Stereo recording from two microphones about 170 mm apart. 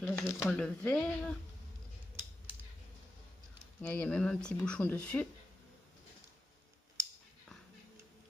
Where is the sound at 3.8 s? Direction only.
10° left (ahead or behind).